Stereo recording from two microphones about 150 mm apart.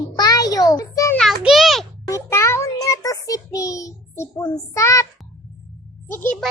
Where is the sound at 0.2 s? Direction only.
25° left (ahead or behind).